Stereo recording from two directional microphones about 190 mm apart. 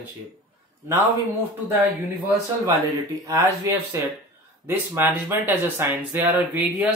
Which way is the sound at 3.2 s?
15° right (ahead or behind).